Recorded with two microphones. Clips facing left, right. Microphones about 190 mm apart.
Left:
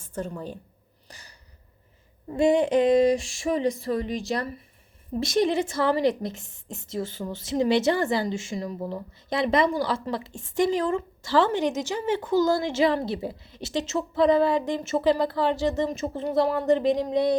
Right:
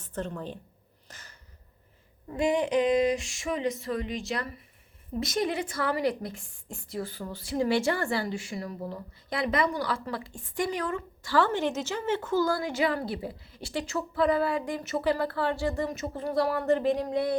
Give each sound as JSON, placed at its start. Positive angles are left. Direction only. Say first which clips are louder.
{"t": 0.0, "sound": "speech", "louder": "left 2 dB", "side_deg": 10}
{"t": 1.0, "sound": "a sound", "louder": "left 2 dB", "side_deg": 15}
{"t": 2.3, "sound": "a woman's voice", "louder": "left 5 dB", "side_deg": 30}